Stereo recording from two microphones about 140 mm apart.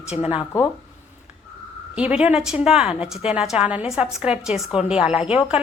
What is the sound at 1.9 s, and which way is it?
A woman's voice, 10° right (ahead or behind).